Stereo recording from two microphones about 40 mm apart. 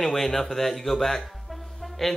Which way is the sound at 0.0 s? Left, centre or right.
Centre.